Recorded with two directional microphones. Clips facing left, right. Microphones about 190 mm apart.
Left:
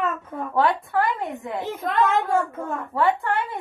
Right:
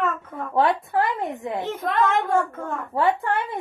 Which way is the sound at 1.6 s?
Centre (ahead or behind).